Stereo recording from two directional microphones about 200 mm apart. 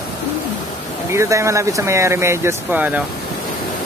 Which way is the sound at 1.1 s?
15° right (ahead or behind).